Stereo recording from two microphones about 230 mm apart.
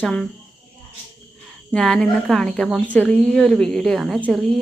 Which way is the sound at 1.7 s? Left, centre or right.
Centre.